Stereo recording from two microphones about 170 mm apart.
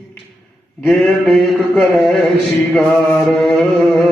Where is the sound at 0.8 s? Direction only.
Centre (ahead or behind).